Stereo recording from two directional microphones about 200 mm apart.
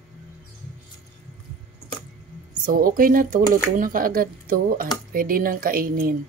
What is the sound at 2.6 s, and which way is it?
Speech, 45° right (ahead or behind).